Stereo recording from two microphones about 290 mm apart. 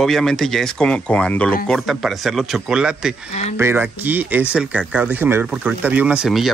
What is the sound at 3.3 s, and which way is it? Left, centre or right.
Speech, left.